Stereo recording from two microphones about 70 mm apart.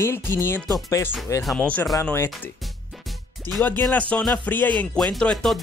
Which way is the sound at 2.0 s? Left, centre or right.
Left.